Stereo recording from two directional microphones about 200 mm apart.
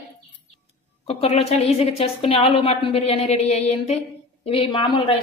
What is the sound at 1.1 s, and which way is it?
A woman's voice, 30° left (ahead or behind).